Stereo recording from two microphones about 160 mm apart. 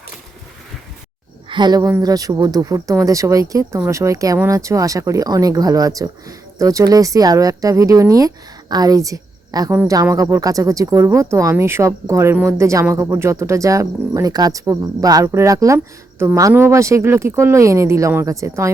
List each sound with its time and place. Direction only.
1.5 s a woman's voice: 30° right (ahead or behind)